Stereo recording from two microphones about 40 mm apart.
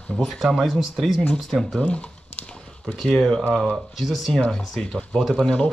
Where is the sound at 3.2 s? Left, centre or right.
Centre.